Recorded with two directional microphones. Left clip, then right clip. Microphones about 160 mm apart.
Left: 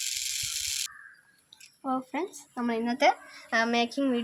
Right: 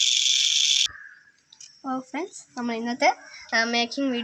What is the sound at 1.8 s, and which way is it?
Speech, 5° right (ahead or behind).